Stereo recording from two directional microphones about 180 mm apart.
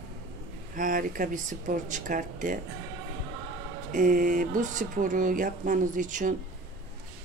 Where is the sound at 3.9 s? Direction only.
45° right (ahead or behind).